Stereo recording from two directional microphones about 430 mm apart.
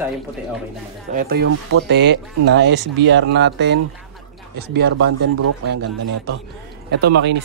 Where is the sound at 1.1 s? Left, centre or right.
Centre.